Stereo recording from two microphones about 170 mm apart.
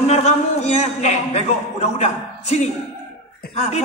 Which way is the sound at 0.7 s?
40° left (ahead or behind).